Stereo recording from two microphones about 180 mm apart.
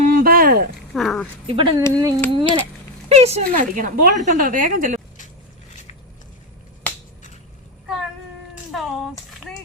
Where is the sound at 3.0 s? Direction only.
35° right (ahead or behind).